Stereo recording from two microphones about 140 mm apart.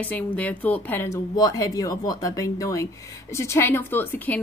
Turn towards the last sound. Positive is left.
turn(degrees=10)  # may be behind; listen again after turning